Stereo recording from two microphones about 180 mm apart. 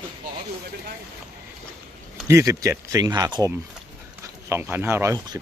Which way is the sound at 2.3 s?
15° right (ahead or behind).